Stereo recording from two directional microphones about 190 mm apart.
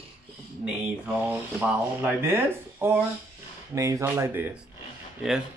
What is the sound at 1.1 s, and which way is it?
Speech, 5° right (ahead or behind).